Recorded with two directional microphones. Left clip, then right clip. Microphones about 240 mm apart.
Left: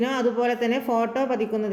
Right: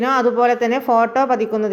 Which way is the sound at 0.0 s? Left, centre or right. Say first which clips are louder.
Right 8 dB; centre.